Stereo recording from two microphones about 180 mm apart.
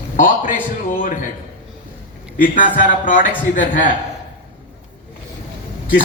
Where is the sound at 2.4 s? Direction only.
45° left (ahead or behind).